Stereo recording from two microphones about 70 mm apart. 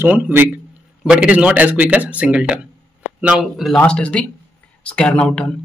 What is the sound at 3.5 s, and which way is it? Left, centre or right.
Speech, centre.